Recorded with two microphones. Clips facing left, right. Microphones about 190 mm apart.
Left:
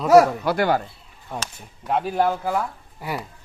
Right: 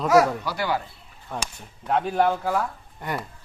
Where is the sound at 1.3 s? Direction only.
10° left (ahead or behind).